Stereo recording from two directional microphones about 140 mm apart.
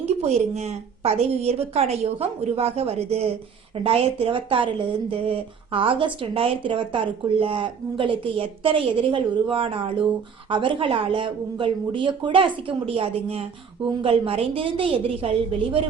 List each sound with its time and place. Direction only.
0.0 s a woman's voice: 50° right (ahead or behind)